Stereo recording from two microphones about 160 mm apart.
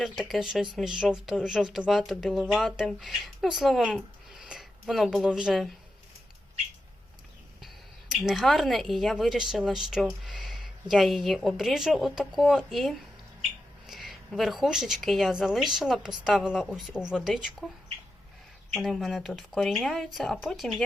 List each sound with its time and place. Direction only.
0.0 s speech: centre (ahead or behind)
8.1 s speech: centre (ahead or behind)
18.7 s speech: centre (ahead or behind)